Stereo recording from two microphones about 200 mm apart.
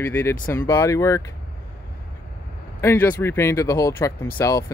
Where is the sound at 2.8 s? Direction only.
10° left (ahead or behind).